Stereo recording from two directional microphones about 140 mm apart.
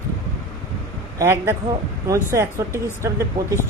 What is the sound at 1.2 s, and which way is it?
Speech, 20° right (ahead or behind).